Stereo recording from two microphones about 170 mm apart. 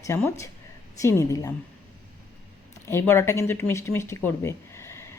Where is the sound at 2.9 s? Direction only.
15° left (ahead or behind).